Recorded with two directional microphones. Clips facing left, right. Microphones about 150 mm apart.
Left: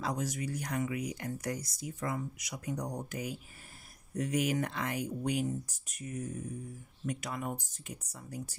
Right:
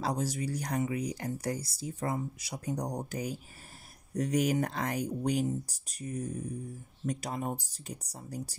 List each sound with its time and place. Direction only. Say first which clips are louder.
0.0 s speech: right 3 dB; 35° right (ahead or behind)